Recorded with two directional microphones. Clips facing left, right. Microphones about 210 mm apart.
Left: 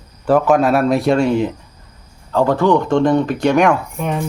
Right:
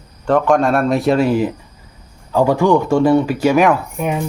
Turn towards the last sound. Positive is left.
turn(degrees=-10)  # may be behind; listen again after turning